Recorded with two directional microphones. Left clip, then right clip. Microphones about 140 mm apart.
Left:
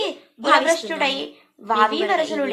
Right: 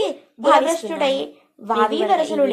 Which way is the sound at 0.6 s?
40° right (ahead or behind).